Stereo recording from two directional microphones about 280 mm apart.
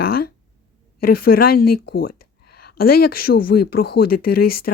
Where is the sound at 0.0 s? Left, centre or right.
Left.